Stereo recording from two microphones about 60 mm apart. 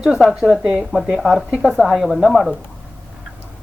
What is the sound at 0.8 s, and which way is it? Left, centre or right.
Speech, centre.